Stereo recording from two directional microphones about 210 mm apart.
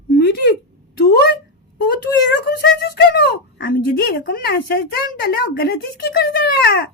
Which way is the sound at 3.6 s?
45° left (ahead or behind).